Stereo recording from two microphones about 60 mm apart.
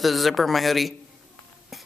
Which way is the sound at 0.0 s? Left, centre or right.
Centre.